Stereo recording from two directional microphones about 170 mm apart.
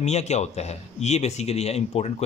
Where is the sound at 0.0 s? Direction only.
40° left (ahead or behind).